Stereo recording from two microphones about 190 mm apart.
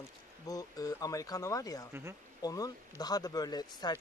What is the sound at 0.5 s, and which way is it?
Speech, 20° left (ahead or behind).